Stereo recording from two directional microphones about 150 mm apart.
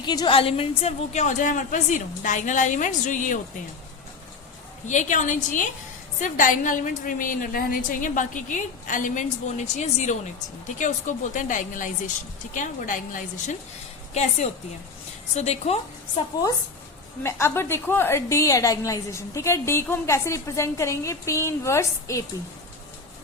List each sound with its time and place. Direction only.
0.0 s a woman's voice: 30° left (ahead or behind); by 3.4 s 60° left (ahead or behind)
4.9 s a woman's voice: 55° left (ahead or behind)
17.2 s a woman's voice: 15° left (ahead or behind)